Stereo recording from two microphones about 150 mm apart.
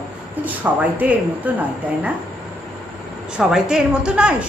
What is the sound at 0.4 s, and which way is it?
A woman's voice, 10° right (ahead or behind).